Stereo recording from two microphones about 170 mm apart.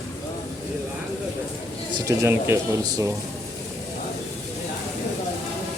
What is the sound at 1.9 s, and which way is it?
Speech, 20° right (ahead or behind).